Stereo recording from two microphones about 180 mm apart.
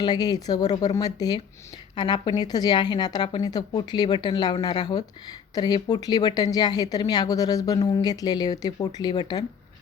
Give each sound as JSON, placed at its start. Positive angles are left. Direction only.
{"t": 0.0, "sound": "a woman's voice", "side_deg": 20}